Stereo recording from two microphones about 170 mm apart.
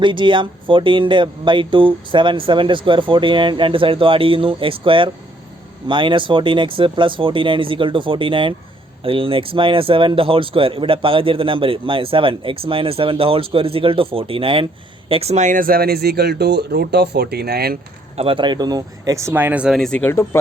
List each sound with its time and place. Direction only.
0.0 s speech: 30° right (ahead or behind); by 17.7 s 65° right (ahead or behind)
18.2 s speech: 30° right (ahead or behind); by 20.4 s 15° left (ahead or behind)